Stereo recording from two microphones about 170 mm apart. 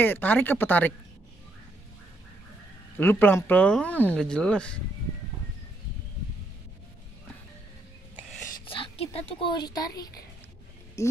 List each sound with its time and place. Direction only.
0.0 s speech: 10° left (ahead or behind)
3.0 s speech: 10° left (ahead or behind)
8.6 s speech: 35° left (ahead or behind); by 11.1 s 15° left (ahead or behind)